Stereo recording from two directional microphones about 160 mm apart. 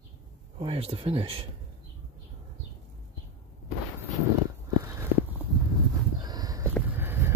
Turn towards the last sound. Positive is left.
turn(degrees=-15)  # may be behind; listen again after turning